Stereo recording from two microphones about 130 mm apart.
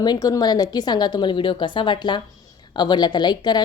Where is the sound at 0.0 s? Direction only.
30° left (ahead or behind).